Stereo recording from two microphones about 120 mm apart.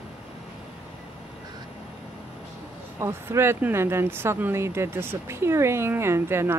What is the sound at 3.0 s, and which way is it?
Speech, 20° right (ahead or behind).